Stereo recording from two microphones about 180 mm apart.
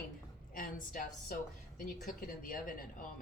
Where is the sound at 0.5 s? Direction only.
50° left (ahead or behind).